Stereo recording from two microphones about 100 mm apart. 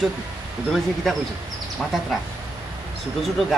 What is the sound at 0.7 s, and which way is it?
Speech, 5° left (ahead or behind).